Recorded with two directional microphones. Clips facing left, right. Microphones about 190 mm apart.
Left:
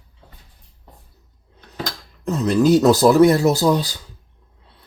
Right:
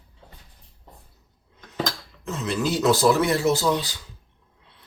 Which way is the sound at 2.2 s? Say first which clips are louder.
Left 9 dB; 40° left (ahead or behind).